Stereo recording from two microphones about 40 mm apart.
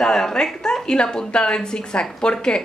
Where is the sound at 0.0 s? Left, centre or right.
Centre.